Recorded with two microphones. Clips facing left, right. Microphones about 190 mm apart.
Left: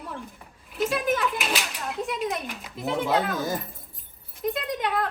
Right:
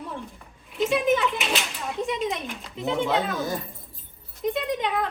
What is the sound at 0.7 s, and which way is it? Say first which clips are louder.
A woman's voice: right 3 dB; centre (ahead or behind).